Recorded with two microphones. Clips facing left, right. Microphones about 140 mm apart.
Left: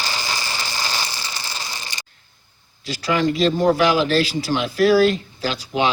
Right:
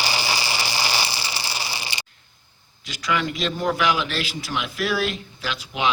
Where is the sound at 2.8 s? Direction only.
35° left (ahead or behind).